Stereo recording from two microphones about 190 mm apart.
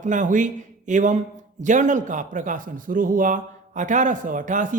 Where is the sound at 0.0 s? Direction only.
40° right (ahead or behind).